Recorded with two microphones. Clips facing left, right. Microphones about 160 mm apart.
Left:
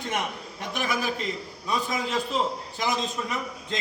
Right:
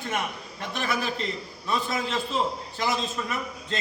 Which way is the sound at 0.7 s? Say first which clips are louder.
Left 1 dB; 15° left (ahead or behind).